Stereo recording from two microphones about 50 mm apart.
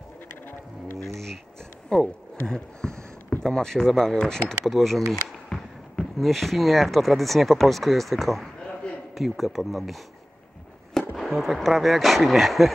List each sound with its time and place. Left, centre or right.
1.9 s a sound: centre
3.5 s speech: centre
4.6 s speech: centre
8.5 s a sound: left
9.1 s speech: centre
11.1 s speech: centre